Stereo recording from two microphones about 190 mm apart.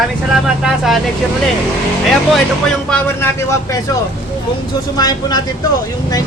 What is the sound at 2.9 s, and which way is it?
Speech, 10° left (ahead or behind).